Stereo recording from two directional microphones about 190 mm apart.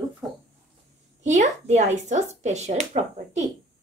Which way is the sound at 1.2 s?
40° right (ahead or behind).